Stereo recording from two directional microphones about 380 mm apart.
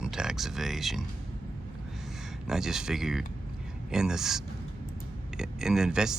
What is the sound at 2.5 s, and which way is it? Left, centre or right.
Speech, centre.